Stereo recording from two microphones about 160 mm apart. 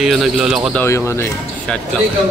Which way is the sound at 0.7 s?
15° left (ahead or behind).